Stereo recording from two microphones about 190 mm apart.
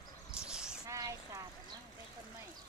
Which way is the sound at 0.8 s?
15° right (ahead or behind).